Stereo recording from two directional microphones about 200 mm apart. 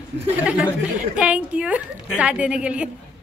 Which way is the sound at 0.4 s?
5° right (ahead or behind).